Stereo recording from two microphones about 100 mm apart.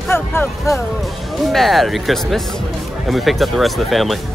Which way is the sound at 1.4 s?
Centre (ahead or behind).